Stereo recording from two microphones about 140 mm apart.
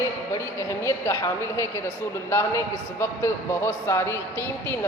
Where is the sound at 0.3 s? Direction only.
20° left (ahead or behind).